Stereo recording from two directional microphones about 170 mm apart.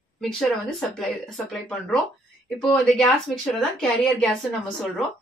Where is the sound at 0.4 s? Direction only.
Centre (ahead or behind).